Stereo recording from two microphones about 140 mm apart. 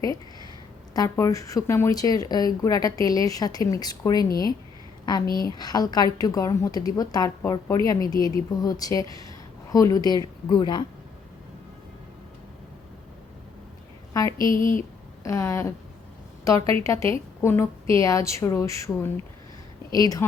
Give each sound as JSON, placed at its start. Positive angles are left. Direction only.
{"t": 0.9, "sound": "a woman's voice", "side_deg": 20}
{"t": 5.2, "sound": "a woman's voice", "side_deg": 90}
{"t": 5.5, "sound": "a woman's voice", "side_deg": 30}
{"t": 14.1, "sound": "a woman's voice", "side_deg": 25}
{"t": 14.5, "sound": "speech", "side_deg": 70}
{"t": 15.2, "sound": "a woman's voice", "side_deg": 20}